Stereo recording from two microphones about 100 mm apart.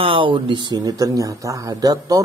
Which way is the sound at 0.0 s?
60° right (ahead or behind).